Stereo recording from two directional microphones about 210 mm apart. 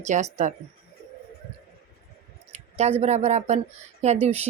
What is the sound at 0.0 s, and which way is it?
Speech, 35° right (ahead or behind).